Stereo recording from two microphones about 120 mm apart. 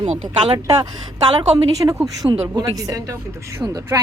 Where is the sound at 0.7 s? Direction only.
35° right (ahead or behind).